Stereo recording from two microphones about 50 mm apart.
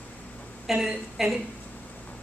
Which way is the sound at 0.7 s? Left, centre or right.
Centre.